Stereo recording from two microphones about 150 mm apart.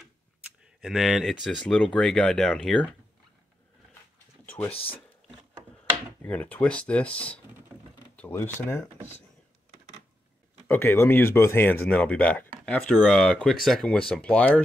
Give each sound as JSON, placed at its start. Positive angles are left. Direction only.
{"t": 0.7, "sound": "speech", "side_deg": 0}
{"t": 4.6, "sound": "speech", "side_deg": 40}
{"t": 6.2, "sound": "speech", "side_deg": 10}
{"t": 10.7, "sound": "speech", "side_deg": 15}